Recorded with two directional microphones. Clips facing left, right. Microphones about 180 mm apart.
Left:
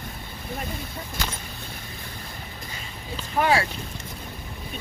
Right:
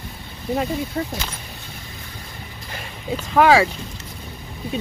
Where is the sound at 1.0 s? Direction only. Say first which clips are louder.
Right 12 dB; 80° right.